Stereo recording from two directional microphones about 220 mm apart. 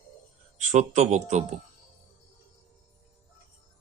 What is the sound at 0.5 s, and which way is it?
Speech, 35° right (ahead or behind).